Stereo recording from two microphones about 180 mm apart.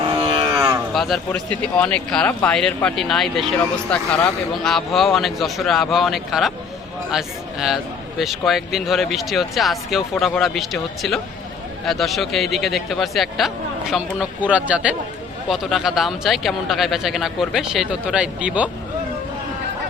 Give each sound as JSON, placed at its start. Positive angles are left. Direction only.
{"t": 0.0, "sound": "a sound", "side_deg": -30}
{"t": 0.5, "sound": "cattle", "side_deg": -20}
{"t": 0.9, "sound": "speech", "side_deg": 0}